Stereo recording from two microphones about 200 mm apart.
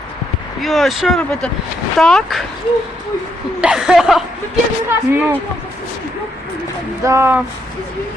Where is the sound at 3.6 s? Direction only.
5° right (ahead or behind).